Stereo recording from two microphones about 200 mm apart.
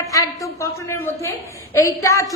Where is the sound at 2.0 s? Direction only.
15° left (ahead or behind).